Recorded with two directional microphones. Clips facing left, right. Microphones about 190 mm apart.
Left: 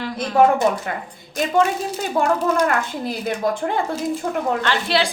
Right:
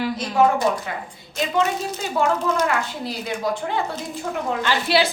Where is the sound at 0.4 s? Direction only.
55° left (ahead or behind).